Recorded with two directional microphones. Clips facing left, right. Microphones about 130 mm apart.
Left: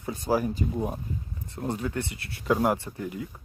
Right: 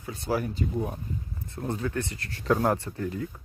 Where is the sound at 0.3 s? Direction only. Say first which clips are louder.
Left 2 dB; 15° left (ahead or behind).